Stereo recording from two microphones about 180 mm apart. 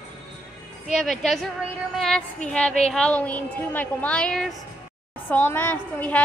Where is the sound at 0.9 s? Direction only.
Centre (ahead or behind).